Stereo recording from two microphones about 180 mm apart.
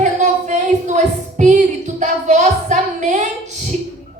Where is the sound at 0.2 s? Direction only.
40° right (ahead or behind).